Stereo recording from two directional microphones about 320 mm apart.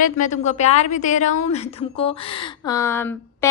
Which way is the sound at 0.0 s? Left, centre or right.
Left.